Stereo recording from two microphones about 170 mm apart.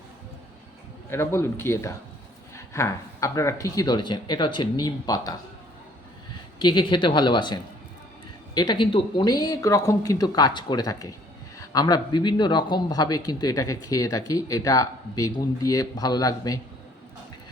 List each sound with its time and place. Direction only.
1.1 s speech: 15° left (ahead or behind)
6.6 s speech: 25° left (ahead or behind)